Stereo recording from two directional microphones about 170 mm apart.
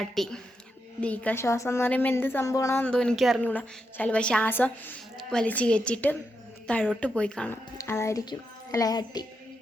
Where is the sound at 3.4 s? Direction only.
10° left (ahead or behind).